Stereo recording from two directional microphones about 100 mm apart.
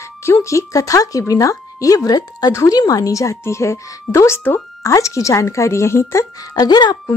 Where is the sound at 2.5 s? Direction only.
30° left (ahead or behind).